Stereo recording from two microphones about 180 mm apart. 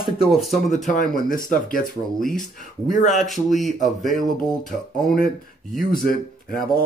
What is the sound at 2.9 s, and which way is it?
Speech, 45° left (ahead or behind).